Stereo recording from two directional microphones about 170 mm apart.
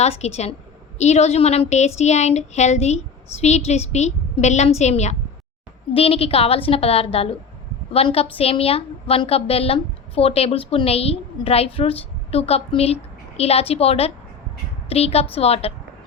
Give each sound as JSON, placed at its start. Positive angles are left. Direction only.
{"t": 0.0, "sound": "a woman's voice", "side_deg": 40}